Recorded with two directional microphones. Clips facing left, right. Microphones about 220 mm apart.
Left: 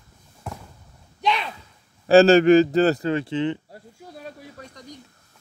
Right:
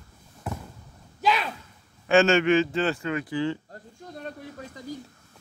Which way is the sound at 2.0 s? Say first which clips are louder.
Left 7 dB; 35° left (ahead or behind).